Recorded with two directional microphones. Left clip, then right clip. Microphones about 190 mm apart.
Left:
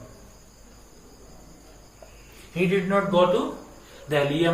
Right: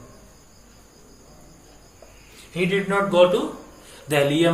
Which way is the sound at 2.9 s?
45° right (ahead or behind).